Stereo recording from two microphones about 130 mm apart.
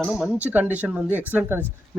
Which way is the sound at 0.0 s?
Centre (ahead or behind).